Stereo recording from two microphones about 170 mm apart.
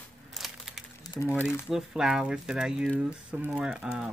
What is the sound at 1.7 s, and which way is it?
Speech, 5° right (ahead or behind).